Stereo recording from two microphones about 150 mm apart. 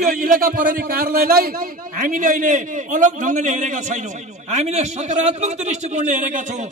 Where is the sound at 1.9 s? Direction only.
65° right (ahead or behind).